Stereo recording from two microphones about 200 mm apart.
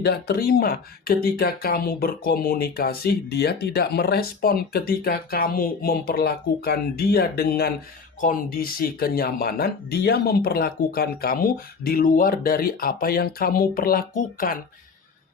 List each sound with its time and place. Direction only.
0.0 s speech: 55° left (ahead or behind)